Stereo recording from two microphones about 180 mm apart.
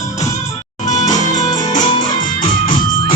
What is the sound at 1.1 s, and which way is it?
Music, 25° left (ahead or behind).